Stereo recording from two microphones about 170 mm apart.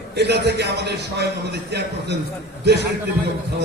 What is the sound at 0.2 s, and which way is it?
A man's voice, 80° right.